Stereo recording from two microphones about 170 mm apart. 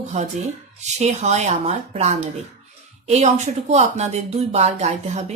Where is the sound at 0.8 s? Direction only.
40° right (ahead or behind).